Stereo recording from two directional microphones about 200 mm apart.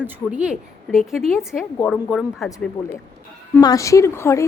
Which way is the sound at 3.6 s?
15° left (ahead or behind).